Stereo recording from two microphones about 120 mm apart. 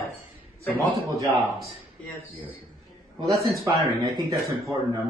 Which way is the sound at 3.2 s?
25° right (ahead or behind).